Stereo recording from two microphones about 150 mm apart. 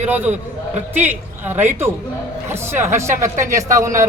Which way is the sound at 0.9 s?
15° right (ahead or behind).